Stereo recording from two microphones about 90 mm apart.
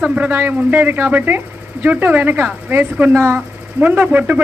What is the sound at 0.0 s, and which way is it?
Speech, 20° right (ahead or behind).